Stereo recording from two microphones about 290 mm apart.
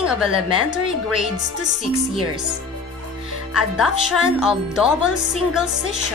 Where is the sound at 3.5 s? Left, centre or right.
Centre.